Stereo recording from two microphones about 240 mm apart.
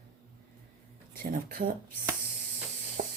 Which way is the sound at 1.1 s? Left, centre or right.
Right.